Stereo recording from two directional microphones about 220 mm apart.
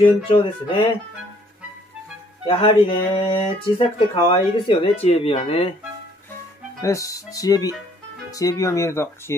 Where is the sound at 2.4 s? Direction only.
25° left (ahead or behind).